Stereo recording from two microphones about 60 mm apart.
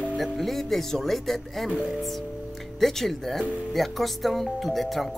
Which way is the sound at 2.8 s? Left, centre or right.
Centre.